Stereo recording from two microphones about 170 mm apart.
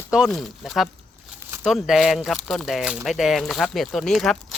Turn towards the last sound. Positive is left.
turn(degrees=0)  # may be behind; listen again after turning